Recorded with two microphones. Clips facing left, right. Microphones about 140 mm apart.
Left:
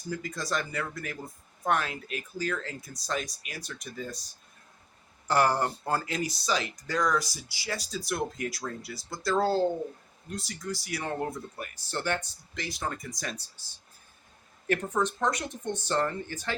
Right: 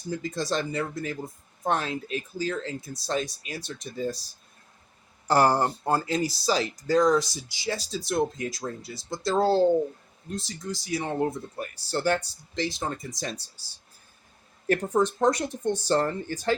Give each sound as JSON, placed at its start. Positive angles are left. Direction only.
{"t": 0.1, "sound": "speech", "side_deg": -25}
{"t": 5.3, "sound": "speech", "side_deg": -35}
{"t": 14.7, "sound": "speech", "side_deg": -35}